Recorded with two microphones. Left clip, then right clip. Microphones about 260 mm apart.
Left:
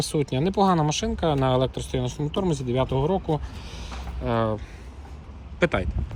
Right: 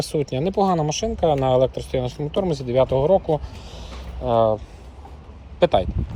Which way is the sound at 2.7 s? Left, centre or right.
Left.